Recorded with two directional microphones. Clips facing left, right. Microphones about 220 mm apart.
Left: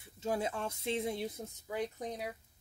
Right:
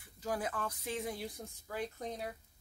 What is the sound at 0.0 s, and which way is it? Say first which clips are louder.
Speech: left 3 dB; 25° left (ahead or behind).